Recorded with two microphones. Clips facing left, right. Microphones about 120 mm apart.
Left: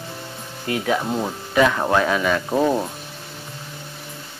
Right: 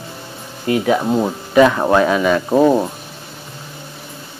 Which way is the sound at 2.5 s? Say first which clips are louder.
Right 7 dB; 75° right (ahead or behind).